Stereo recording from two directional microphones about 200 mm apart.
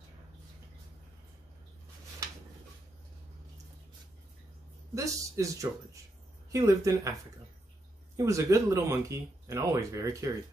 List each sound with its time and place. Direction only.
4.9 s speech: 15° right (ahead or behind)
8.2 s speech: 15° right (ahead or behind)